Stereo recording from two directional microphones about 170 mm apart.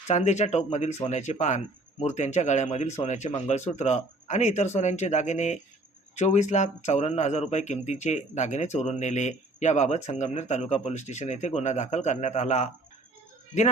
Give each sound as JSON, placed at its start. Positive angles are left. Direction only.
{"t": 0.1, "sound": "a man's voice", "side_deg": 40}